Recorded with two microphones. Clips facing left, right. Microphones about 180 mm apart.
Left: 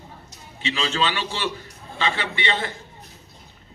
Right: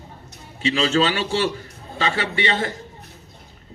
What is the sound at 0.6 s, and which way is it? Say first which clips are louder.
A man's voice: right 6 dB; 40° right (ahead or behind).